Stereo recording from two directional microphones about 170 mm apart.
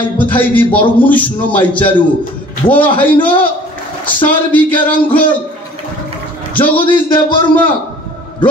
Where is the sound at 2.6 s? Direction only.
30° left (ahead or behind).